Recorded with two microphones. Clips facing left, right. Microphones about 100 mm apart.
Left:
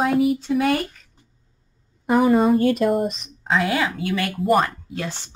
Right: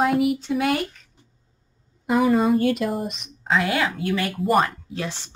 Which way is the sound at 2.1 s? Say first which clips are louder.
Left 2 dB; 35° left (ahead or behind).